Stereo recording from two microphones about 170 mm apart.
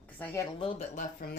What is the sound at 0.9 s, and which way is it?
Speech, 55° left (ahead or behind).